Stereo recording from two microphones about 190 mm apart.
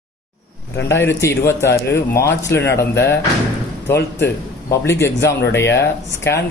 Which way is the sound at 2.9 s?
65° left (ahead or behind).